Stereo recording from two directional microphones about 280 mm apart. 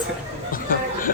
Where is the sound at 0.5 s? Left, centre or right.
Left.